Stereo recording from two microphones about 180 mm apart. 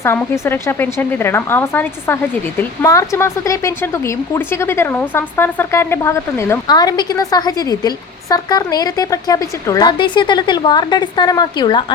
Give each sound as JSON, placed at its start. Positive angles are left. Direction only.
{"t": 0.0, "sound": "speech", "side_deg": 15}